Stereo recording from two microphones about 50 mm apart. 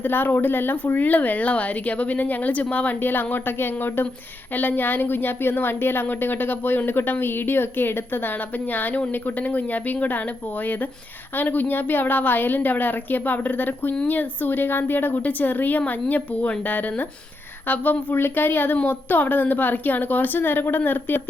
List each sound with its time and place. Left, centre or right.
0.0 s a woman's voice: left